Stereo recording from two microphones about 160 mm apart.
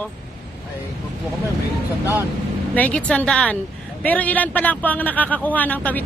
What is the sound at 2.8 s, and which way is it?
Speech, 10° left (ahead or behind).